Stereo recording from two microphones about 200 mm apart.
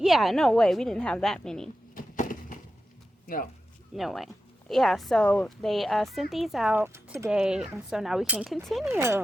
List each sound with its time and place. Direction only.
0.0 s speech: centre (ahead or behind)
2.0 s a sound: 40° left (ahead or behind)
3.9 s speech: centre (ahead or behind)
8.9 s speech: 10° right (ahead or behind)